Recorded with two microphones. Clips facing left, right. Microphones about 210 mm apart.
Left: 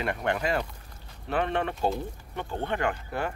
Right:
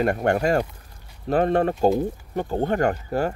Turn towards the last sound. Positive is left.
turn(degrees=-40)  # may be behind; listen again after turning